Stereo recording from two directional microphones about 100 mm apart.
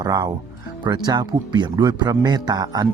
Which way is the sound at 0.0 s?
45° right (ahead or behind).